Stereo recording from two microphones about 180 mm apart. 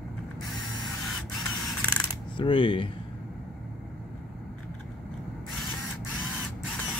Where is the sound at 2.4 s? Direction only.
30° left (ahead or behind).